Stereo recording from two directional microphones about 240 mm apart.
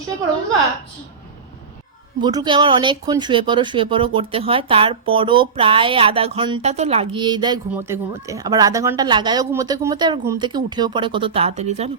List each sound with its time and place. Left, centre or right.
2.2 s a woman's voice: centre